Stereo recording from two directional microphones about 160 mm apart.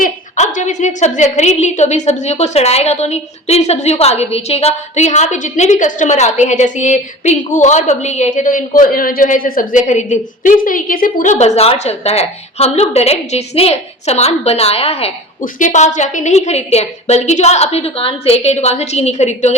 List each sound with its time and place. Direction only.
0.0 s a woman's voice: 50° left (ahead or behind)